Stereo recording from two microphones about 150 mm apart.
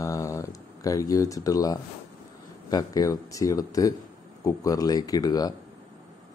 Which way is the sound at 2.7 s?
25° left (ahead or behind).